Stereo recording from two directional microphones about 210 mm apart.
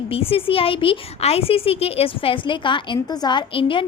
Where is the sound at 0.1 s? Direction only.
25° left (ahead or behind).